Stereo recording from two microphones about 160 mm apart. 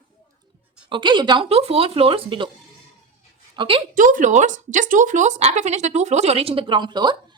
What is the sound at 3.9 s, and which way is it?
Speech, 55° right (ahead or behind).